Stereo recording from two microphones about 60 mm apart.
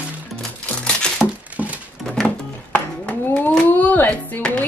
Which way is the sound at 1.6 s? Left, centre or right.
Right.